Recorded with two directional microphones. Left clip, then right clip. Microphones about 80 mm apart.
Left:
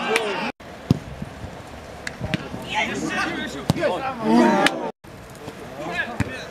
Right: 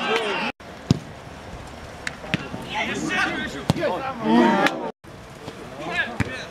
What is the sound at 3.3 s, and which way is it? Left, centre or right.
Basketball bounce, centre.